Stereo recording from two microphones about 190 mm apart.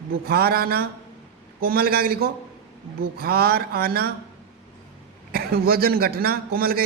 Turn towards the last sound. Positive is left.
turn(degrees=-50)  # may be behind; listen again after turning